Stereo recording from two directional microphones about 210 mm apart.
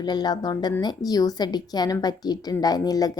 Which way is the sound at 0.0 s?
20° left (ahead or behind).